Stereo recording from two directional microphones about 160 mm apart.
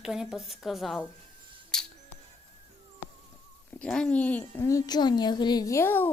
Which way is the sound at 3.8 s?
5° left (ahead or behind).